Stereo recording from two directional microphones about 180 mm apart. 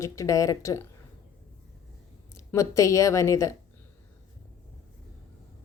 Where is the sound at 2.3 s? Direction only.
15° left (ahead or behind).